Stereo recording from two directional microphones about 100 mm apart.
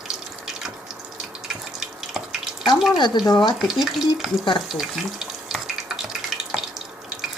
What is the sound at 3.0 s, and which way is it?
Speech, 45° left (ahead or behind).